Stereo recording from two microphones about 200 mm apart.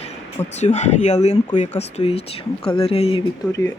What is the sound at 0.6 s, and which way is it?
Speech, 35° left (ahead or behind).